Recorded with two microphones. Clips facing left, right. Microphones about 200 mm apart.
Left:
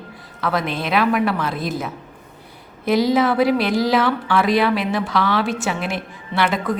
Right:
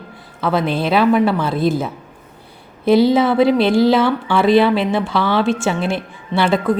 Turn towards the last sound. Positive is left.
turn(degrees=-30)  # may be behind; listen again after turning